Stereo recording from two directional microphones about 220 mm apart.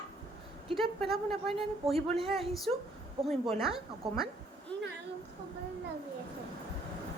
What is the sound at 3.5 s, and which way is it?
Speech, centre (ahead or behind).